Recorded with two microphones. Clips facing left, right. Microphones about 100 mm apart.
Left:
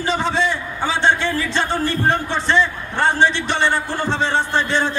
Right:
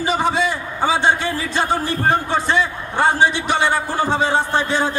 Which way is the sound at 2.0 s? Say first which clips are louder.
Right 4 dB; 10° right (ahead or behind).